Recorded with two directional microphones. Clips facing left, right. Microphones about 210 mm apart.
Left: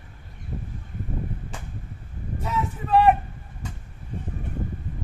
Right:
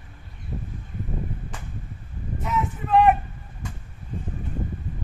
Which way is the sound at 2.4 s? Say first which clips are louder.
Right 1 dB; 35° left (ahead or behind).